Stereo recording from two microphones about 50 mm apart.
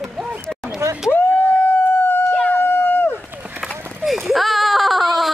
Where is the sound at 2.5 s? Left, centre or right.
Left.